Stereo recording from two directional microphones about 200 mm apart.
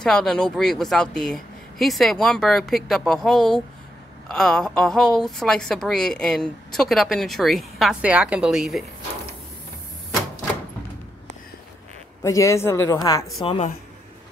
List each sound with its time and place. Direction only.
0.0 s a woman's voice: 5° left (ahead or behind)
12.2 s speech: 15° left (ahead or behind)
13.4 s a woman's voice: 30° left (ahead or behind)